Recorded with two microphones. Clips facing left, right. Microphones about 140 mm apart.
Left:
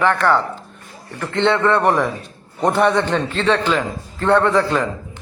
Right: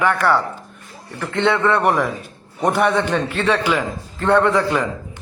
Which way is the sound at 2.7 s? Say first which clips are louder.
Left 2 dB; 25° left (ahead or behind).